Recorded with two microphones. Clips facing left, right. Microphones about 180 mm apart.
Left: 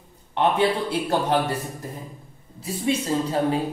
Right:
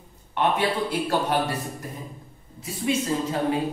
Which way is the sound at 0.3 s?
25° left (ahead or behind).